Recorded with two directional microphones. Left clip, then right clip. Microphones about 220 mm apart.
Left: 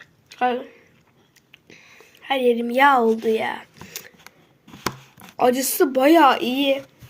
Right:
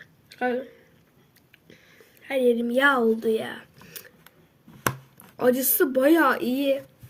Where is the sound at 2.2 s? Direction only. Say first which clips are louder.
Left 4 dB; 40° left (ahead or behind).